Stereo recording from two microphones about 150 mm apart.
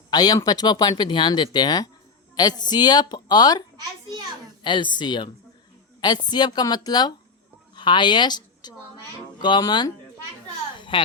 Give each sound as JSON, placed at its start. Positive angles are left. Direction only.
{"t": 0.1, "sound": "speech", "side_deg": 25}
{"t": 4.6, "sound": "a woman's voice", "side_deg": 30}
{"t": 10.8, "sound": "a sound", "side_deg": 35}